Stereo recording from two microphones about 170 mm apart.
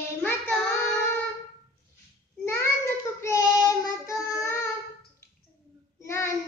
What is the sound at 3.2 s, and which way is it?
Child singing, 20° left (ahead or behind).